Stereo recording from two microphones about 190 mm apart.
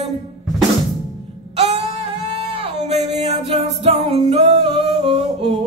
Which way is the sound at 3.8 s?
35° right (ahead or behind).